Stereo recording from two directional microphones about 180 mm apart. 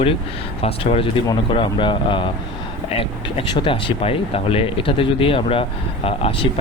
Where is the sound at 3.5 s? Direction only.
25° left (ahead or behind).